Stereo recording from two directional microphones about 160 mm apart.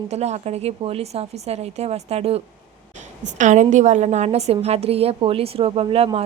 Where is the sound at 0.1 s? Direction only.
45° right (ahead or behind).